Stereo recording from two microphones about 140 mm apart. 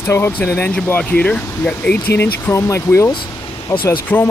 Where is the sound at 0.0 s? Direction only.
15° left (ahead or behind).